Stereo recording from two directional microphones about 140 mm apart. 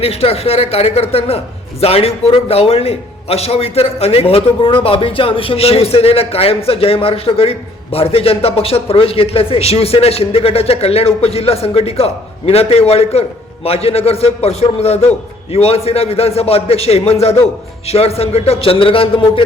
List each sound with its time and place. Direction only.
0.0 s speech: 45° left (ahead or behind)